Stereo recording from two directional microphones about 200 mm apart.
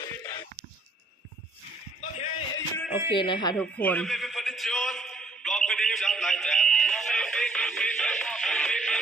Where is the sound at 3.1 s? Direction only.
25° left (ahead or behind).